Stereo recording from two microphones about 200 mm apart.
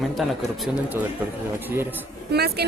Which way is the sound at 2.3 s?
55° right (ahead or behind).